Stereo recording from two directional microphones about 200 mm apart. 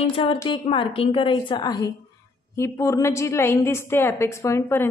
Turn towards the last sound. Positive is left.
turn(degrees=15)  # may be behind; listen again after turning